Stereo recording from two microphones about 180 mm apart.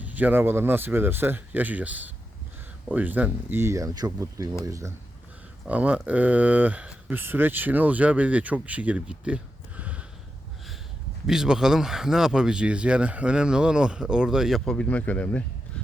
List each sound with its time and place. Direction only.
0.0 s speech: 10° right (ahead or behind)
11.3 s speech: 5° right (ahead or behind)